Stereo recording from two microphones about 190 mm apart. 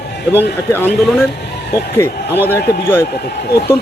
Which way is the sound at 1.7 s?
15° left (ahead or behind).